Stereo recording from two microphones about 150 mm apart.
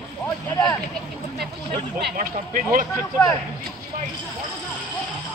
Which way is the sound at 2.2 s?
60° right (ahead or behind).